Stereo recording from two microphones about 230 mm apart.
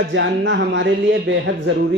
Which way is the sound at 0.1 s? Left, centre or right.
Right.